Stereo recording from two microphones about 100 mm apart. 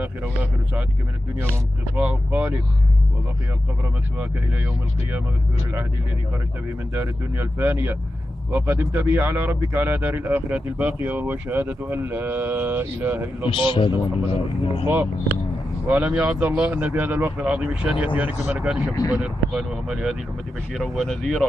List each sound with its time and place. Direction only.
0.0 s a man's voice: 15° right (ahead or behind)
2.0 s a man's voice: 15° right (ahead or behind)
7.0 s speech: 20° right (ahead or behind)
13.5 s a man's voice: 60° left (ahead or behind)
15.9 s a man's voice: 15° right (ahead or behind); by 21.5 s 10° left (ahead or behind)